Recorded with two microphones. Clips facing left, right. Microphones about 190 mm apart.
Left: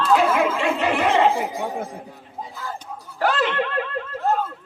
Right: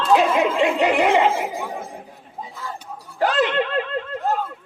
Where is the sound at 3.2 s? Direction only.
20° right (ahead or behind).